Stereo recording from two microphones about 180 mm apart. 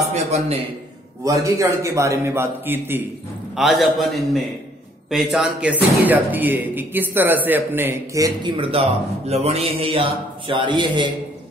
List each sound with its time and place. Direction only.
0.1 s a man's voice: 35° right (ahead or behind)
1.2 s speech: 15° right (ahead or behind)
3.5 s a man's voice: centre (ahead or behind); by 11.1 s 25° right (ahead or behind)